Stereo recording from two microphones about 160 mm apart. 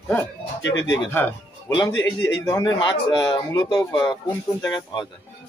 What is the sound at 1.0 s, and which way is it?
Speech, 15° left (ahead or behind).